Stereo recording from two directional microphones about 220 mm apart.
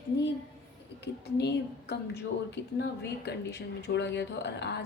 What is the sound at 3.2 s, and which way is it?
A woman's voice, 50° left (ahead or behind).